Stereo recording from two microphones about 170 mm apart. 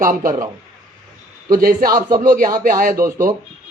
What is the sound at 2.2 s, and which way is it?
Speech, 50° right (ahead or behind).